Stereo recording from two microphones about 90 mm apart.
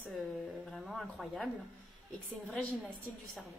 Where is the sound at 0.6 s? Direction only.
Centre (ahead or behind).